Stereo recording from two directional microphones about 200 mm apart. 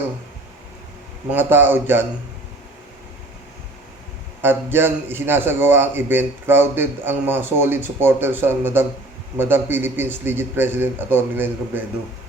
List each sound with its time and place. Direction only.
1.3 s a man's voice: 10° right (ahead or behind)
4.4 s a man's voice: 10° right (ahead or behind)